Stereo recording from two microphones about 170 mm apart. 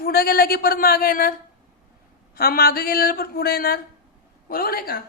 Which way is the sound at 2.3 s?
60° left (ahead or behind).